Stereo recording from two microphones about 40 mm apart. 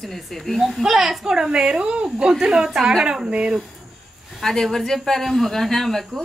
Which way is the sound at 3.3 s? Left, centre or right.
Right.